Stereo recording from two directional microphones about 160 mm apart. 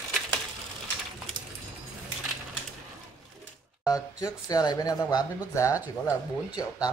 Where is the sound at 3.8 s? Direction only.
20° left (ahead or behind).